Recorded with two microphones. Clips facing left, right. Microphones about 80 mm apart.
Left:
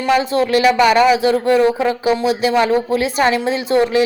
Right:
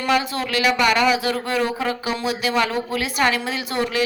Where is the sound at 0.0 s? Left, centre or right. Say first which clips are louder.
Left 6 dB; left.